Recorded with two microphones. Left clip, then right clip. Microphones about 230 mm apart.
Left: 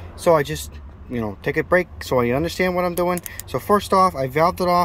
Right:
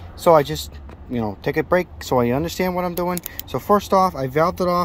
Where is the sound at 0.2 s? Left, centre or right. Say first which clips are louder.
Right 3 dB; centre.